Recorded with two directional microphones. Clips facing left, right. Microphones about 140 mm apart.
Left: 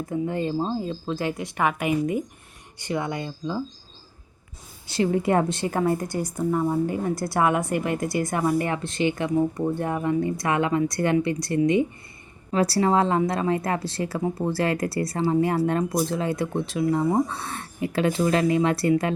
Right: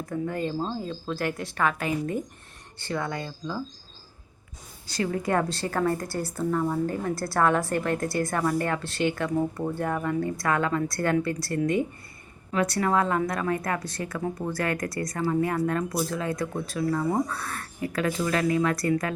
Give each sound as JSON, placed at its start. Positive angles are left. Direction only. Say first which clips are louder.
{"t": 0.1, "sound": "a woman's voice", "louder": "left 3 dB", "side_deg": 20}
{"t": 4.9, "sound": "a woman's voice", "louder": "left 5 dB", "side_deg": 25}
{"t": 11.5, "sound": "speech", "louder": "left 5 dB", "side_deg": -50}
{"t": 12.5, "sound": "a woman's voice", "louder": "left 4 dB", "side_deg": 35}